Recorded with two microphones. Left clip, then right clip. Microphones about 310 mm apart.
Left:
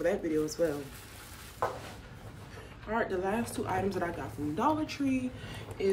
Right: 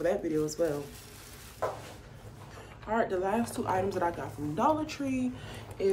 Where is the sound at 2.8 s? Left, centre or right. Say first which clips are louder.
Right 2 dB; centre.